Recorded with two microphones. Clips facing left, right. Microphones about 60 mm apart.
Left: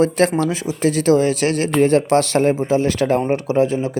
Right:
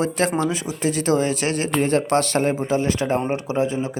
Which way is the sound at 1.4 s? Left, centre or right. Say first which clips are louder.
Left 5 dB; right.